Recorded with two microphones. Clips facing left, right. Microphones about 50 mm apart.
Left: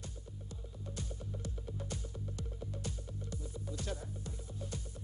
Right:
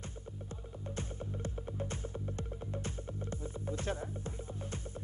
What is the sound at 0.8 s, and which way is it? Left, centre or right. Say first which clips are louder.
Music: right 4 dB; right.